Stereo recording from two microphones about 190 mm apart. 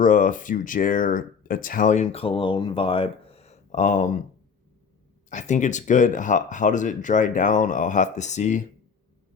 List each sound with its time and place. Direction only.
0.0 s speech: 45° left (ahead or behind)
5.3 s speech: 40° left (ahead or behind)